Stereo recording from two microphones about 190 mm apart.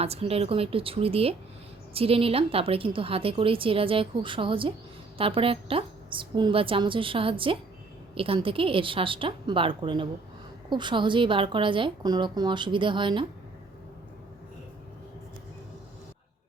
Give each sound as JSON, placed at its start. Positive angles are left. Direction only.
{"t": 0.0, "sound": "a woman's voice", "side_deg": -30}